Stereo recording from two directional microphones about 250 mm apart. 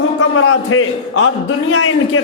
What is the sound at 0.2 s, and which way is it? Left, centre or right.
A man's voice, left.